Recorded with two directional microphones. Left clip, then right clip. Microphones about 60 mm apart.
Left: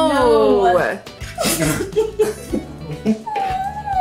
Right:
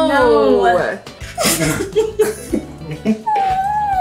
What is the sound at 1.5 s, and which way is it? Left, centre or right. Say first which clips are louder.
Speech: right 2 dB; left.